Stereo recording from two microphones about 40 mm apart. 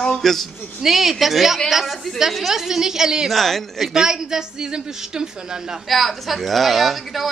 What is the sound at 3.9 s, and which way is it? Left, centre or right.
A woman's voice, centre.